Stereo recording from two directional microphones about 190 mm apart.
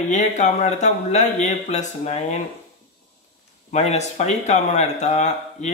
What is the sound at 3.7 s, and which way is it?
Speech, 35° left (ahead or behind).